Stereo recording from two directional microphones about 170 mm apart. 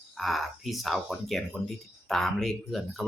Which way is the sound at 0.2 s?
Centre (ahead or behind).